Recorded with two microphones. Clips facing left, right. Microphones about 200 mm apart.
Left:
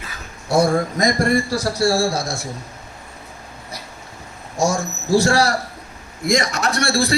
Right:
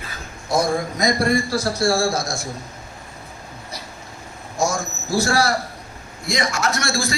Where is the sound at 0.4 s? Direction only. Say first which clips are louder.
Left 4 dB; 65° left (ahead or behind).